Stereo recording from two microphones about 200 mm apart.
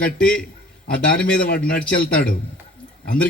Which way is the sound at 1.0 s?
50° left (ahead or behind).